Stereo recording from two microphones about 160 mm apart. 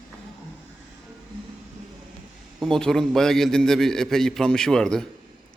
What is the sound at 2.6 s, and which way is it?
Speech, 5° left (ahead or behind).